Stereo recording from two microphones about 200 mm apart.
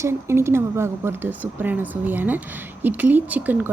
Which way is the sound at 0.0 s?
15° right (ahead or behind).